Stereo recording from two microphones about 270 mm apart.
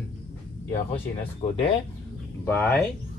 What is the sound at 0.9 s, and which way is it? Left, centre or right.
Speech, centre.